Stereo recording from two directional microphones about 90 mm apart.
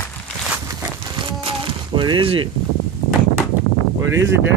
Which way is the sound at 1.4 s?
65° right (ahead or behind).